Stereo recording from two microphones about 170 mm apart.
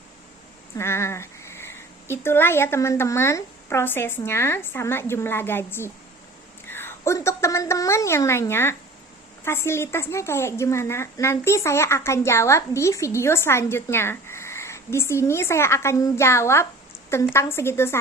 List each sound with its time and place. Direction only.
0.8 s a woman's voice: 15° left (ahead or behind)